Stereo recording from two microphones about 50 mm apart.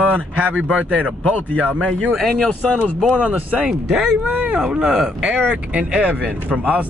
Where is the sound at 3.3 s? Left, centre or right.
Right.